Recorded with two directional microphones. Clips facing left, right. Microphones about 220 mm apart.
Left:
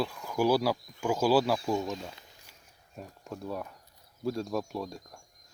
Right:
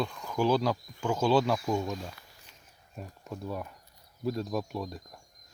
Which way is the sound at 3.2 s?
Centre (ahead or behind).